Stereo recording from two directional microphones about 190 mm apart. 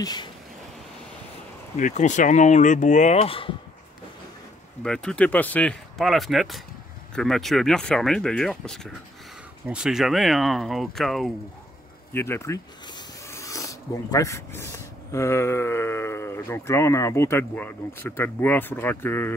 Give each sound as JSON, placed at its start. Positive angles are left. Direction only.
{"t": 0.0, "sound": "speech", "side_deg": 20}
{"t": 1.8, "sound": "speech", "side_deg": 40}
{"t": 4.8, "sound": "speech", "side_deg": 5}
{"t": 12.1, "sound": "speech", "side_deg": 10}